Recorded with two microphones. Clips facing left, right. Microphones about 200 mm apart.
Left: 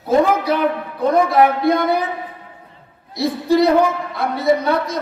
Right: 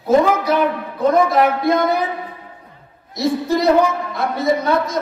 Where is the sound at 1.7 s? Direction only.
45° right (ahead or behind).